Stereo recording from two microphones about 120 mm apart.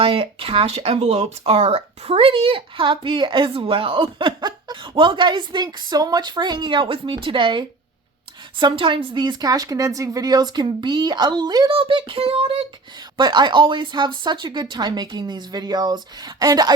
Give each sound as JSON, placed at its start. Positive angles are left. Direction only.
{"t": 0.0, "sound": "speech", "side_deg": -50}
{"t": 13.1, "sound": "speech", "side_deg": -35}